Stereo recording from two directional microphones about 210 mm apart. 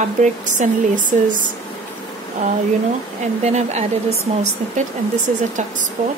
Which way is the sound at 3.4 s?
35° right (ahead or behind).